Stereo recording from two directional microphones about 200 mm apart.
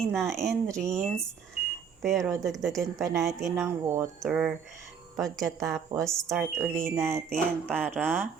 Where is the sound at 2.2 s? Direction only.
15° right (ahead or behind).